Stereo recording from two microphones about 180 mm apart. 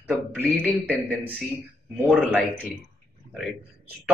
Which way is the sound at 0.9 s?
Centre (ahead or behind).